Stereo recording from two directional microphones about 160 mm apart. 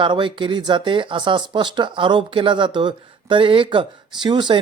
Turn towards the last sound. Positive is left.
turn(degrees=-30)  # may be behind; listen again after turning